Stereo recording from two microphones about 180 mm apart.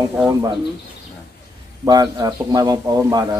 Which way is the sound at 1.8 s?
20° right (ahead or behind).